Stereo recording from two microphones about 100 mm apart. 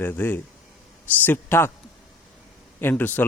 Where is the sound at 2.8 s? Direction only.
20° left (ahead or behind).